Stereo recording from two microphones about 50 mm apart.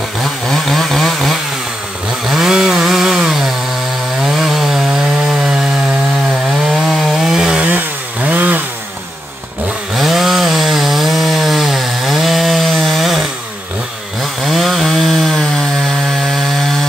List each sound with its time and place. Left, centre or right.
0.2 s chainsaw: centre
2.2 s chainsaw: centre
6.7 s chainsaw: centre
8.2 s chainsaw: right
9.9 s chainsaw: centre
14.4 s chainsaw: centre